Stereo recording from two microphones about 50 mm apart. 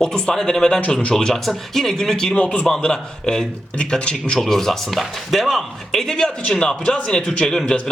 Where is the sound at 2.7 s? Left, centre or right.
Centre.